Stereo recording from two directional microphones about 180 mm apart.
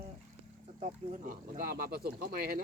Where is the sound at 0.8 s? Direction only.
50° right (ahead or behind).